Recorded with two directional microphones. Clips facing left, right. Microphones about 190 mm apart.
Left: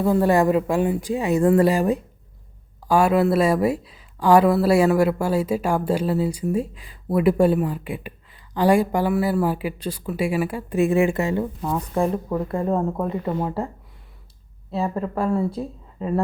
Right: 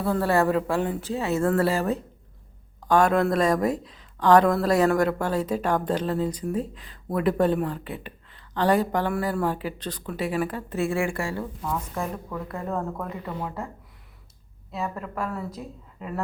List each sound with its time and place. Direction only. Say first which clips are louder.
0.0 s speech: left 5 dB; 15° left (ahead or behind)
13.2 s speech: left 8 dB; 40° left (ahead or behind)
14.7 s speech: left 7 dB; 30° left (ahead or behind)